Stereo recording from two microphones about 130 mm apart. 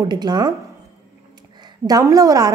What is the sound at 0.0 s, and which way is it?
Speech, 30° right (ahead or behind).